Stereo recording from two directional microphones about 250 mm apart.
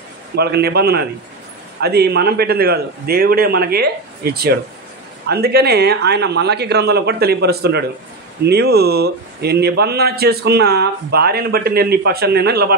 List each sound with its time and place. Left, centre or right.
0.4 s a man's voice: right